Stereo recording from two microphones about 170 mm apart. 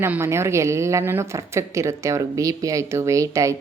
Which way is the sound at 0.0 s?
15° right (ahead or behind).